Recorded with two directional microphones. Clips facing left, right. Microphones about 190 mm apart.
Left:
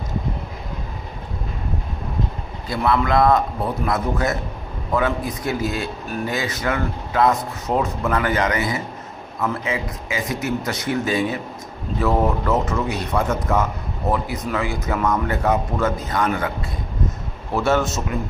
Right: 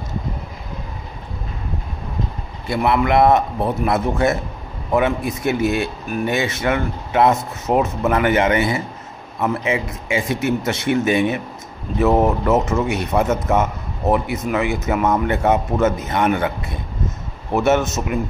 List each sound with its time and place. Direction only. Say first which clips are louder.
2.7 s speech: right 2 dB; 25° right (ahead or behind)
17.6 s speech: right 3 dB; 20° right (ahead or behind)